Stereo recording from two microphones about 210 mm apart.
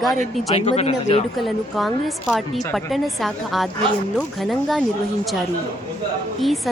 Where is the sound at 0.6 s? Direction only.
30° left (ahead or behind).